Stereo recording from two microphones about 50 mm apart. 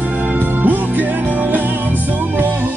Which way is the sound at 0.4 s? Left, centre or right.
Right.